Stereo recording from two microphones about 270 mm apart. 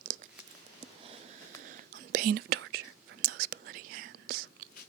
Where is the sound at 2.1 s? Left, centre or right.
Right.